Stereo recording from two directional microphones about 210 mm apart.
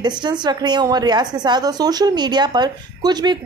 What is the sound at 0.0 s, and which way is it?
A woman's voice, 20° right (ahead or behind).